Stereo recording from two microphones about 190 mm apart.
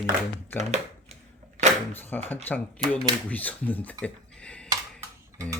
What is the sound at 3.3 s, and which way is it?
Speech, 10° left (ahead or behind).